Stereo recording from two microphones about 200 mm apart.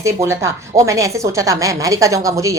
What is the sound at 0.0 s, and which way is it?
A woman's voice, 15° right (ahead or behind).